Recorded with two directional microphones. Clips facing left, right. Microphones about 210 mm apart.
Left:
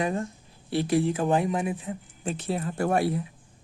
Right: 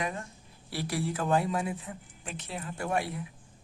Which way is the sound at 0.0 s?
30° left (ahead or behind).